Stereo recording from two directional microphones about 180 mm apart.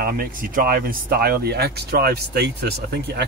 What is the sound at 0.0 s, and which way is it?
Speech, 50° right (ahead or behind).